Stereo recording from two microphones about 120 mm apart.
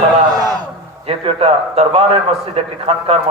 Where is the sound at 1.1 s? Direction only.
55° right (ahead or behind).